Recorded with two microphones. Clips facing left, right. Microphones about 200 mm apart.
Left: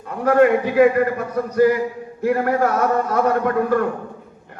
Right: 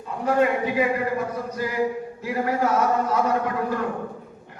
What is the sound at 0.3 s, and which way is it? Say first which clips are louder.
A man's voice: left 6 dB; 60° left (ahead or behind).